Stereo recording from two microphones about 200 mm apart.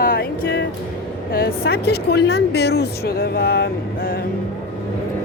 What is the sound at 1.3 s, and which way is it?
Speech, 50° left (ahead or behind).